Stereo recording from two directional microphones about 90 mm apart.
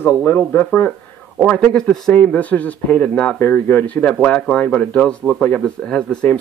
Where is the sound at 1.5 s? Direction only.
10° left (ahead or behind).